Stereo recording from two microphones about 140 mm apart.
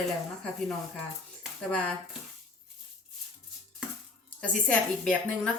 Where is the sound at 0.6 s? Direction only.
5° left (ahead or behind).